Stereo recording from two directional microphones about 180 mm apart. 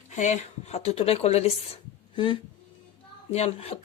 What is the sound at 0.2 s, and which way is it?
Speech, 40° left (ahead or behind).